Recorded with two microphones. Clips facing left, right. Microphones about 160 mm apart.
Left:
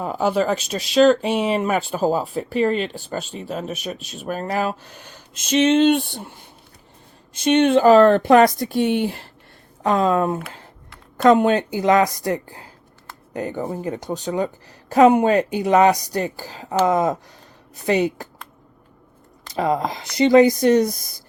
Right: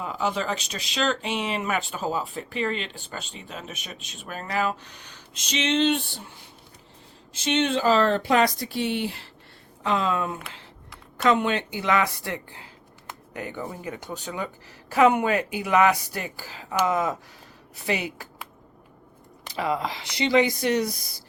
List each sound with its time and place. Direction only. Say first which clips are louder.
0.0 s speech: left 7 dB; 45° left (ahead or behind)
4.0 s speech: left 8 dB; centre (ahead or behind)
4.3 s speech: left 4 dB; 45° left (ahead or behind)
7.3 s speech: left 8 dB; 55° left (ahead or behind)
19.5 s speech: left 6 dB; 40° left (ahead or behind)